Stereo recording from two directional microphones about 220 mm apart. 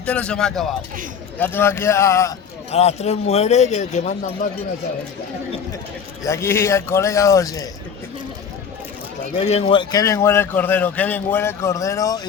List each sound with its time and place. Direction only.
0.0 s a man's voice: 5° left (ahead or behind)
2.7 s a man's voice: 30° left (ahead or behind)
6.2 s a man's voice: 10° left (ahead or behind)
9.4 s a man's voice: 30° left (ahead or behind)